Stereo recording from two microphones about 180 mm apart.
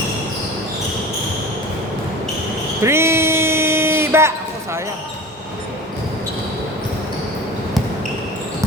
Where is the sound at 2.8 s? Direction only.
15° right (ahead or behind).